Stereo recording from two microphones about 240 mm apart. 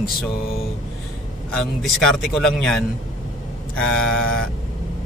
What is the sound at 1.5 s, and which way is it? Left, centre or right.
Speech, centre.